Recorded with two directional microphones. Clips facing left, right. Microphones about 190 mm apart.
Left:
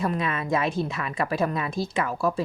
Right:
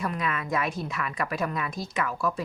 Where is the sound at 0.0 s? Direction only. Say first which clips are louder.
Left 3 dB; 25° left (ahead or behind).